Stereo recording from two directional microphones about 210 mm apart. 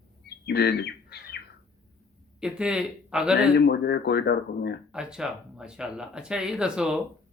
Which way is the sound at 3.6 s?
50° left (ahead or behind).